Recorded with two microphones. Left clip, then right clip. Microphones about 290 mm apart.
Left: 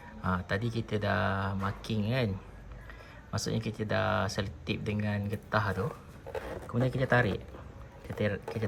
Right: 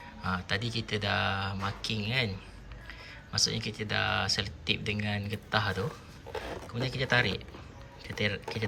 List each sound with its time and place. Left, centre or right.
0.3 s speech: centre
3.3 s speech: centre